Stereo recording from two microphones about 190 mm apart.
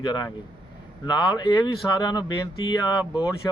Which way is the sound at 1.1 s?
25° left (ahead or behind).